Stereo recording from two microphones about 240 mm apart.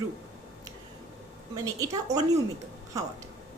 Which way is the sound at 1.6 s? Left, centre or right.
Centre.